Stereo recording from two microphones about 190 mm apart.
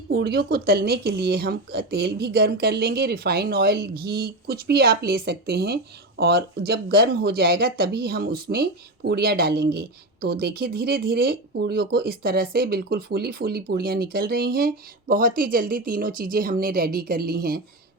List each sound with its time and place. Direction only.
0.1 s speech: 55° right (ahead or behind)